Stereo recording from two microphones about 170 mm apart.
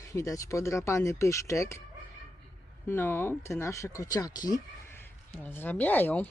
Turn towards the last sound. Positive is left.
turn(degrees=10)  # may be behind; listen again after turning